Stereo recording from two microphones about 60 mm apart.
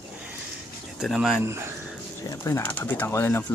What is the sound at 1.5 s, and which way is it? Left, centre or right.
Speech, right.